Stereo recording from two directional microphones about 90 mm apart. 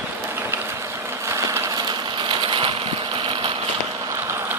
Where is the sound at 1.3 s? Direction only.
35° right (ahead or behind).